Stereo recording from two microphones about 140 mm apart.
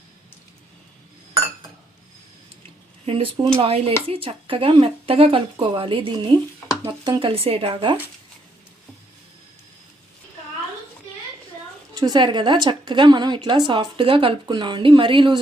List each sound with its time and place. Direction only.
3.1 s a woman's voice: 40° right (ahead or behind)
11.9 s a woman's voice: 30° right (ahead or behind)